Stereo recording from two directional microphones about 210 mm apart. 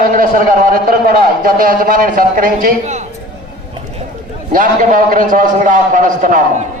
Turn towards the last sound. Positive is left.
turn(degrees=-40)  # may be behind; listen again after turning